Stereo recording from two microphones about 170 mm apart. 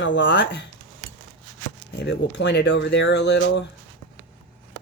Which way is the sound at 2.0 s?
90° left.